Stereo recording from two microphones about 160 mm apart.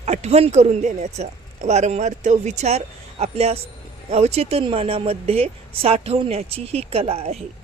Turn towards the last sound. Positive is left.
turn(degrees=-40)  # may be behind; listen again after turning